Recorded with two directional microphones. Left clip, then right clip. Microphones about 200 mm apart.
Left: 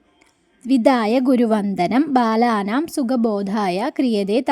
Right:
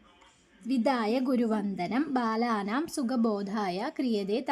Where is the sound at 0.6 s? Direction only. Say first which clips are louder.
Left 12 dB; 40° left (ahead or behind).